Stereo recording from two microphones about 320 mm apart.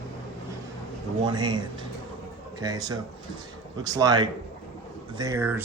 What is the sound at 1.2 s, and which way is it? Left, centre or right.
Speech, centre.